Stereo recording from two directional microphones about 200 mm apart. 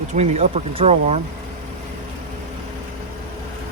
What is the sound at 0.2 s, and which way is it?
Speech, 35° right (ahead or behind).